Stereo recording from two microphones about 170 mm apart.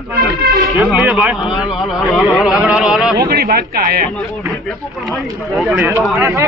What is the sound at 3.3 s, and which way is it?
Speech, 65° right (ahead or behind).